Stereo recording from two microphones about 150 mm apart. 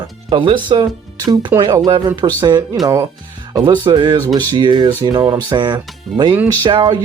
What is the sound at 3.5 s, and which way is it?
Speech, 30° right (ahead or behind).